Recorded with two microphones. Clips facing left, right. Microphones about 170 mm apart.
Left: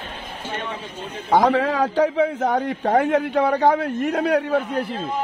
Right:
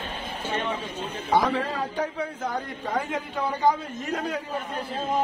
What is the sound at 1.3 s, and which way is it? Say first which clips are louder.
A man's voice: left 7 dB; 90° left.